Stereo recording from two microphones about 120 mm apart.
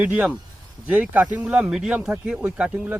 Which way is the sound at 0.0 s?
10° right (ahead or behind).